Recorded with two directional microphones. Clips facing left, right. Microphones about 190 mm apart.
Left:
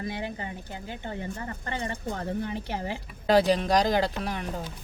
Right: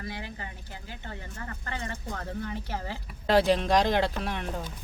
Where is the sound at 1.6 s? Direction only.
20° left (ahead or behind).